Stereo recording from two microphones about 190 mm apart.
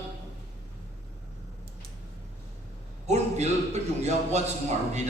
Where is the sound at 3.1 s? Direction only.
35° right (ahead or behind).